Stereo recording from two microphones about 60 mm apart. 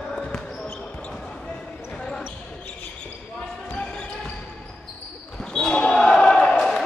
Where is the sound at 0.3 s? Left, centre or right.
Centre.